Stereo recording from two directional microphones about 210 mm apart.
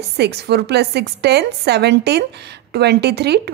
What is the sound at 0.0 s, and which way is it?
A woman's voice, 50° right (ahead or behind).